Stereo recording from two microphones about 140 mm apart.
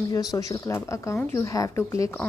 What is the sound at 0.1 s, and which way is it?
A woman's voice, 25° left (ahead or behind).